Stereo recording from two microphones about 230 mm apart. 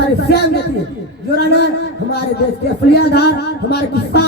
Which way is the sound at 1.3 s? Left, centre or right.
Left.